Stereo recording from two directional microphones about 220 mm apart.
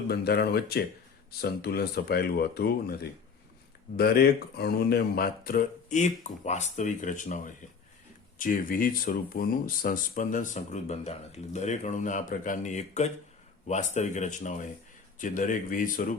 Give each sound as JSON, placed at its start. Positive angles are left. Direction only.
{"t": 0.1, "sound": "speech", "side_deg": 45}